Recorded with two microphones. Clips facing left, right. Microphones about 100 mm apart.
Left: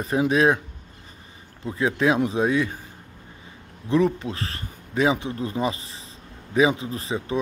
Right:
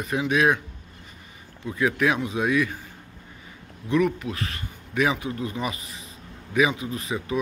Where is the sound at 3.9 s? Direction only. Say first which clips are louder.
Left 2 dB; 30° left (ahead or behind).